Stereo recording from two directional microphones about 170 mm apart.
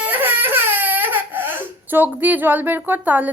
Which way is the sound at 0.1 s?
10° right (ahead or behind).